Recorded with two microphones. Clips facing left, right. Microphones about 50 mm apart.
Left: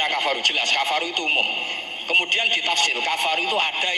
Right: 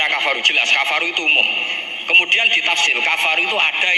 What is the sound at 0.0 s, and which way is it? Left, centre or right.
Speech, right.